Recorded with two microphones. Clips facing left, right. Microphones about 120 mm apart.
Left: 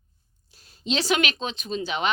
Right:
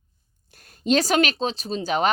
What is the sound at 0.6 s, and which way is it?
Speech, 50° right (ahead or behind).